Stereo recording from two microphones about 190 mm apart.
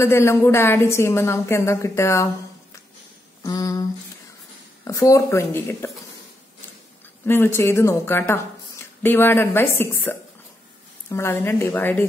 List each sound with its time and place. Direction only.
0.0 s a woman's voice: 15° left (ahead or behind)
3.4 s a sound: 20° left (ahead or behind)
4.8 s a woman's voice: 15° left (ahead or behind)
7.2 s a woman's voice: 10° left (ahead or behind)